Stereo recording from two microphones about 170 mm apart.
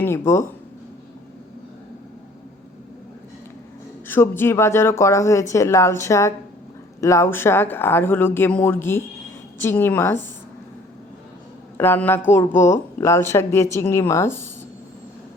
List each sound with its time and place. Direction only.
0.0 s speech: 15° left (ahead or behind)
4.1 s speech: 15° left (ahead or behind)
11.8 s speech: 10° left (ahead or behind)